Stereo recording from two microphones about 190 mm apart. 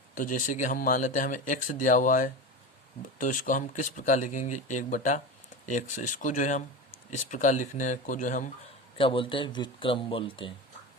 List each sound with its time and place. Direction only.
0.1 s speech: 45° left (ahead or behind)
9.0 s speech: 25° left (ahead or behind)